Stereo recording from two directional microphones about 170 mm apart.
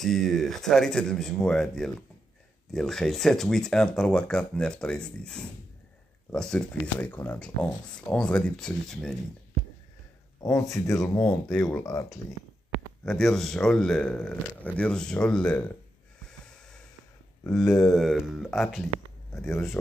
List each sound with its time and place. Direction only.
0.0 s speech: centre (ahead or behind)
10.4 s speech: 20° left (ahead or behind)
13.0 s speech: 5° left (ahead or behind)
17.9 s speech: centre (ahead or behind)